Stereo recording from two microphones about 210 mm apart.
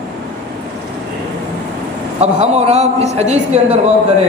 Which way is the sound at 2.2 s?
30° right (ahead or behind).